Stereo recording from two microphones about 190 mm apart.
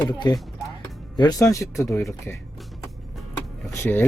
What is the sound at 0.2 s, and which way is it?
Speech, 25° left (ahead or behind).